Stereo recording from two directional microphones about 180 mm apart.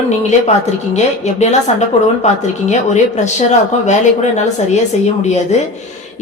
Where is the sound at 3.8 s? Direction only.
40° left (ahead or behind).